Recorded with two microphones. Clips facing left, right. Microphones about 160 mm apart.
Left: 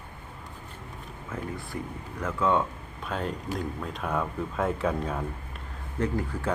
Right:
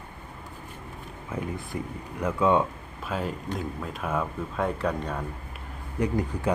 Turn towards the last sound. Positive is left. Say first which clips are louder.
# right 2 dB
turn(degrees=-15)  # may be behind; listen again after turning